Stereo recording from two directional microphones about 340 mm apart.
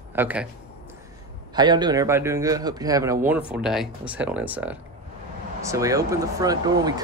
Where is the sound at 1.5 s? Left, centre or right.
Centre.